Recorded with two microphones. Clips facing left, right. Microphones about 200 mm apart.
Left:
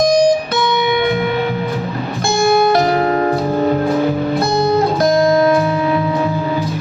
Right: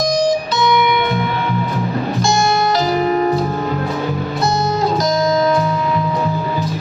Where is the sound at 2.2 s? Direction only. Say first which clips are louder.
Left 5 dB; 60° left (ahead or behind).